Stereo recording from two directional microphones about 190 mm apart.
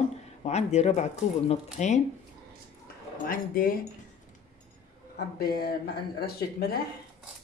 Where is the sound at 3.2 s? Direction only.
50° left (ahead or behind).